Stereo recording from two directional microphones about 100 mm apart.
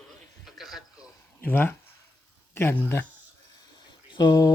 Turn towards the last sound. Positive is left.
turn(degrees=45)  # may be behind; listen again after turning